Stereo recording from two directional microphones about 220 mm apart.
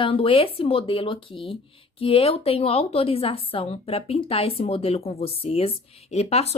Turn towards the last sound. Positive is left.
turn(degrees=30)  # may be behind; listen again after turning